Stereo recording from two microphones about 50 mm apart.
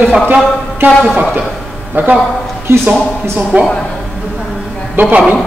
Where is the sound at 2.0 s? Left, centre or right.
Right.